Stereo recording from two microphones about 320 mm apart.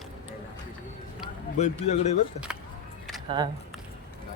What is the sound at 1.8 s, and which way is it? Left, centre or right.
Speech, left.